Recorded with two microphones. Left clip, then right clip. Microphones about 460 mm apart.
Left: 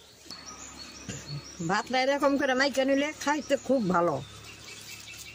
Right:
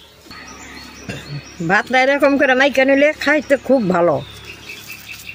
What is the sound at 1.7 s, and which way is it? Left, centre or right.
Speech, left.